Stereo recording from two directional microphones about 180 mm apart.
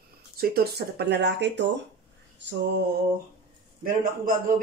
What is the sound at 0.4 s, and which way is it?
Speech, 60° right (ahead or behind).